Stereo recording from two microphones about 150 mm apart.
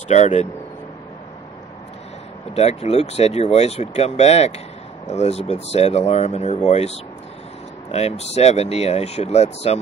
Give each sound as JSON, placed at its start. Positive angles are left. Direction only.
{"t": 0.1, "sound": "speech", "side_deg": 50}
{"t": 2.5, "sound": "speech", "side_deg": 45}